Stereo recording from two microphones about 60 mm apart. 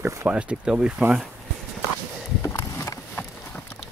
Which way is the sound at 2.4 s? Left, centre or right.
Left.